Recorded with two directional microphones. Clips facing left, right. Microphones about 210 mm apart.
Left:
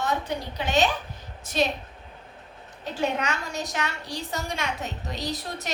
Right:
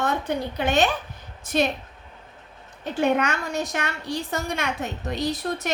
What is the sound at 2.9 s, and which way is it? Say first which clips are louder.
A woman's voice: right 5 dB; 55° right (ahead or behind).